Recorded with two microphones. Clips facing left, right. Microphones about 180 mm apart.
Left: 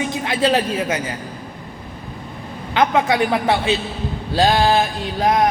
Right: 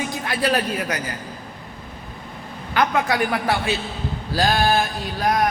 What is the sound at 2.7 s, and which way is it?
Speech, 20° left (ahead or behind).